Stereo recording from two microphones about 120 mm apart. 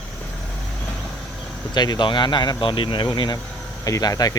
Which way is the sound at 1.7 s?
35° left (ahead or behind).